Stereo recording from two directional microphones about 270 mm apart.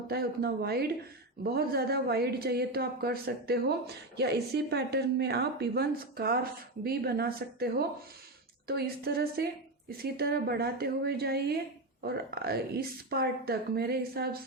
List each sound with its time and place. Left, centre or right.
0.1 s a woman's voice: right